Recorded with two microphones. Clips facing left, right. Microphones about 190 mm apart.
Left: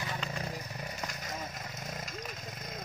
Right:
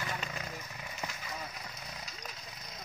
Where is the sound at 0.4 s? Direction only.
35° left (ahead or behind).